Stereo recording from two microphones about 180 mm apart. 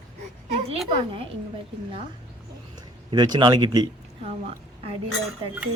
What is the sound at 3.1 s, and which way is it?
Speech, 25° right (ahead or behind).